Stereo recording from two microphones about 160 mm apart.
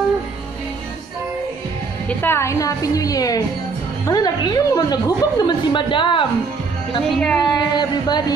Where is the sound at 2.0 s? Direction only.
15° left (ahead or behind); by 6.2 s 30° left (ahead or behind).